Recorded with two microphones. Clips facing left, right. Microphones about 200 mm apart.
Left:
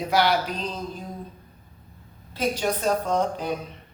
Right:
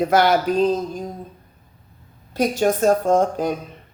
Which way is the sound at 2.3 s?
45° right (ahead or behind).